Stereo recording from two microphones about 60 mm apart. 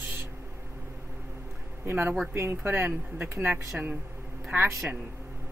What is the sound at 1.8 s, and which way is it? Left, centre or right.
Speech, right.